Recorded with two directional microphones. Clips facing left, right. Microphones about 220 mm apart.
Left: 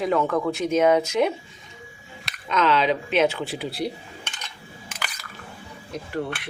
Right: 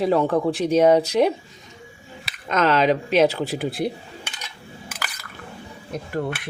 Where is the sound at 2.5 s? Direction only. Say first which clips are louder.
Right 3 dB; 45° right (ahead or behind).